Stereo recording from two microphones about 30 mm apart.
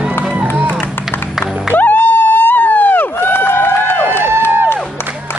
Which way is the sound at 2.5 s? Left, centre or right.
Left.